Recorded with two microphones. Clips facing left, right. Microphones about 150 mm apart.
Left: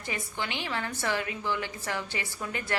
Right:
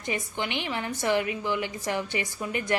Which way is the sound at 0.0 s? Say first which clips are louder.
Right 4 dB; 20° right (ahead or behind).